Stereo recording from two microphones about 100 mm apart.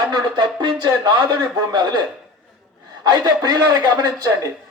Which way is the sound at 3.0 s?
45° right (ahead or behind).